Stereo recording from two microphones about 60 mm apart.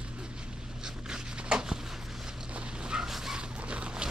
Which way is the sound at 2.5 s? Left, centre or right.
Centre.